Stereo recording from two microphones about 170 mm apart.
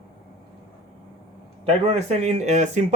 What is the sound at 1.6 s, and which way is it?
Speech, 40° right (ahead or behind).